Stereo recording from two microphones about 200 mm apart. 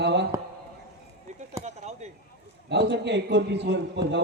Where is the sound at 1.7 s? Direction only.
35° right (ahead or behind).